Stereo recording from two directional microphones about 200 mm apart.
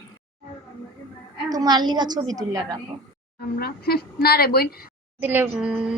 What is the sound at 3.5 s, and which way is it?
A woman's voice, 50° left (ahead or behind).